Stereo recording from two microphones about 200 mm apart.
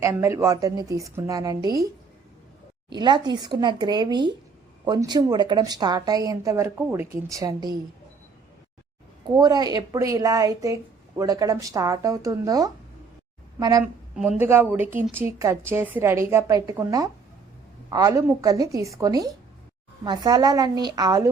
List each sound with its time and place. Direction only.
0.0 s a woman's voice: 15° right (ahead or behind)
2.9 s a woman's voice: 25° right (ahead or behind)
9.2 s a woman's voice: 20° right (ahead or behind)
14.2 s a woman's voice: 10° right (ahead or behind)